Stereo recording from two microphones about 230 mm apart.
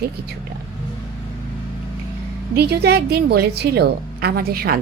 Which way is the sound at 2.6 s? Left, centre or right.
Right.